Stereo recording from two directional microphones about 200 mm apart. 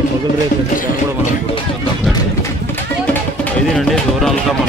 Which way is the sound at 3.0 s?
5° left (ahead or behind).